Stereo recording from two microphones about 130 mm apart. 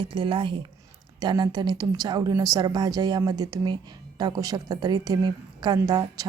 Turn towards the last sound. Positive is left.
turn(degrees=-30)  # may be behind; listen again after turning